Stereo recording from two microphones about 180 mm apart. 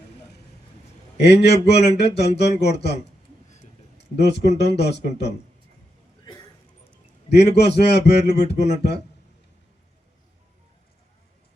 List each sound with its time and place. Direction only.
1.2 s a man's voice: 70° left (ahead or behind)
3.9 s a sound: 70° left (ahead or behind)
4.5 s a man's voice: 70° left (ahead or behind)
7.3 s a man's voice: 70° left (ahead or behind)